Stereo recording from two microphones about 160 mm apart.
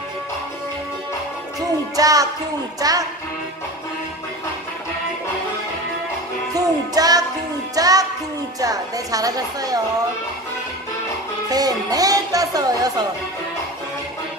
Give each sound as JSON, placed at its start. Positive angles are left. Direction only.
{"t": 2.0, "sound": "music", "side_deg": -20}
{"t": 6.5, "sound": "music", "side_deg": -25}
{"t": 8.5, "sound": "a woman's voice", "side_deg": -20}
{"t": 11.4, "sound": "music", "side_deg": -25}